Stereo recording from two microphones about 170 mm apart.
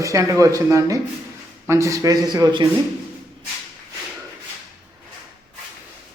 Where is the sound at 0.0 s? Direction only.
20° right (ahead or behind).